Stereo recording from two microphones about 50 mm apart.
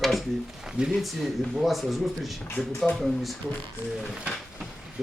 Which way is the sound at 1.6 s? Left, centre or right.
Centre.